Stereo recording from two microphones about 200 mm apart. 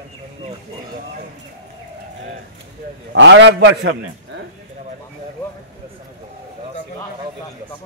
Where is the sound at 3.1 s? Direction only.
65° right (ahead or behind).